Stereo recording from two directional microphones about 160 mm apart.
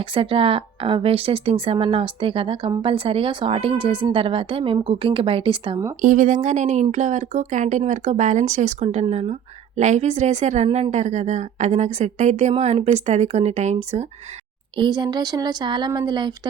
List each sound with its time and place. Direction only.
0.0 s speech: 35° right (ahead or behind)
6.0 s speech: 55° right (ahead or behind)
14.8 s speech: 25° right (ahead or behind)